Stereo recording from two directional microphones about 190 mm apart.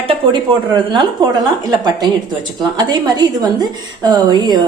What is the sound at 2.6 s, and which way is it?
Speech, 20° right (ahead or behind).